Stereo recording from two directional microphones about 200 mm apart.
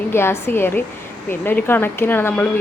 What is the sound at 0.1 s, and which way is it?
Speech, 10° left (ahead or behind).